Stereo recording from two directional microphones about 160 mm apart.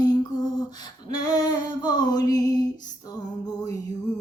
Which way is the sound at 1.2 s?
25° left (ahead or behind).